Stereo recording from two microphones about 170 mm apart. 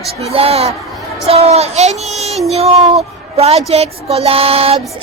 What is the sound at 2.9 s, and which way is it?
Speech, 35° right (ahead or behind).